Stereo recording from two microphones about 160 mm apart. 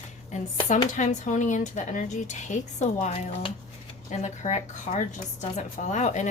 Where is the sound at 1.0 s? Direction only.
50° left (ahead or behind).